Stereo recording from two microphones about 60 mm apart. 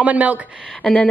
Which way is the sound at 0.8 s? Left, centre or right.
Centre.